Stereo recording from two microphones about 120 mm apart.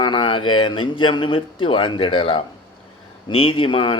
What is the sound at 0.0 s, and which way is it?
Speech, 40° left (ahead or behind).